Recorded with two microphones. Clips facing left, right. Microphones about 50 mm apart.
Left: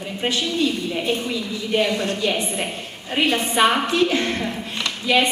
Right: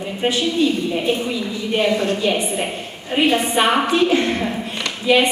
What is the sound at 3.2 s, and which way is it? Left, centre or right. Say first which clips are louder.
Speech: right 3 dB; centre.